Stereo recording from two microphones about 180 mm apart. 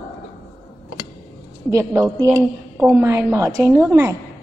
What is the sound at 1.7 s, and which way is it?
A woman's voice, 15° right (ahead or behind).